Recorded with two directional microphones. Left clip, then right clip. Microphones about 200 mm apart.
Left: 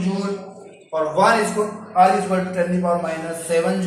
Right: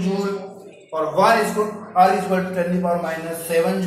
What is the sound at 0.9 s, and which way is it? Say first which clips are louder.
A man's voice: even; 10° left (ahead or behind).